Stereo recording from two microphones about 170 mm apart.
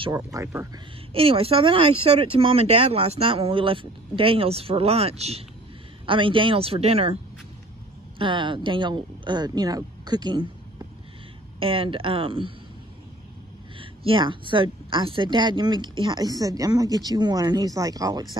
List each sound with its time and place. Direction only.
0.1 s a woman's voice: 20° right (ahead or behind)
1.1 s speech: 35° right (ahead or behind)
8.2 s a woman's voice: 30° right (ahead or behind)
11.6 s speech: 30° right (ahead or behind)
13.7 s a woman's voice: 30° right (ahead or behind)